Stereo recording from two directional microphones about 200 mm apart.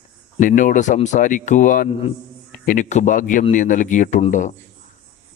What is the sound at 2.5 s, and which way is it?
A man's voice, 40° left (ahead or behind).